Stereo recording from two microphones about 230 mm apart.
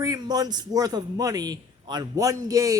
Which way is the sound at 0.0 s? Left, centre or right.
Centre.